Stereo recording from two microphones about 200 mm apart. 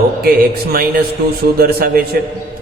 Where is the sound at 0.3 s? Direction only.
50° right (ahead or behind).